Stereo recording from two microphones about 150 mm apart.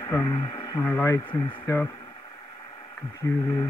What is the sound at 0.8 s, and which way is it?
Speech, 15° left (ahead or behind).